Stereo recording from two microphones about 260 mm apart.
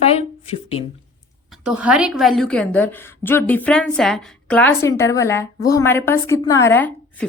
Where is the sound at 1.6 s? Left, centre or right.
Centre.